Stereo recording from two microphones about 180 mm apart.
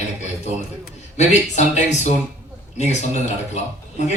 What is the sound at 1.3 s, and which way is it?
A man's voice, 40° left (ahead or behind).